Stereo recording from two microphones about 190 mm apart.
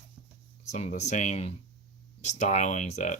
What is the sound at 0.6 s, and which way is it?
Speech, 40° left (ahead or behind).